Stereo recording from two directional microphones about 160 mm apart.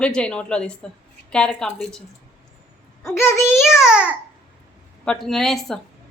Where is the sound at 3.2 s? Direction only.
15° left (ahead or behind).